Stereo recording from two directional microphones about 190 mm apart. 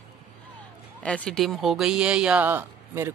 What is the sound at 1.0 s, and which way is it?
Speech, 5° left (ahead or behind).